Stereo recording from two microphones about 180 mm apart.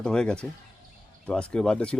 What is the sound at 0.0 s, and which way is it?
A man's voice, 5° left (ahead or behind).